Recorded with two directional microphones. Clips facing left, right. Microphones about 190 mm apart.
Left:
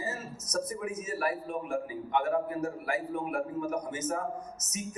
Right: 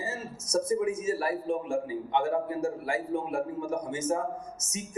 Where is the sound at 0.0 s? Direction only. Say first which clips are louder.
Right 1 dB; 25° right (ahead or behind).